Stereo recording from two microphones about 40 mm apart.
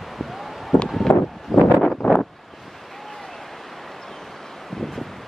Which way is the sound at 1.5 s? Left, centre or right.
Centre.